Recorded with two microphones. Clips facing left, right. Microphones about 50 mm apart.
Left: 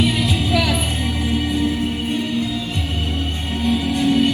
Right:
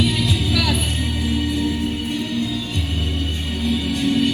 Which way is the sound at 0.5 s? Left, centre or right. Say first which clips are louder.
Left 3 dB; left.